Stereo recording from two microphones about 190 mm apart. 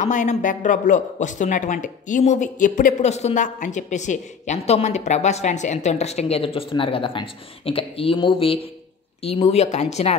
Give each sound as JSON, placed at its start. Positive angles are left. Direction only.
{"t": 0.0, "sound": "speech", "side_deg": 40}